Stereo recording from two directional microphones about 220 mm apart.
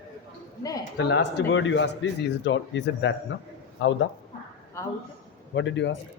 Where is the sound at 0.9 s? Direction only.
55° left (ahead or behind).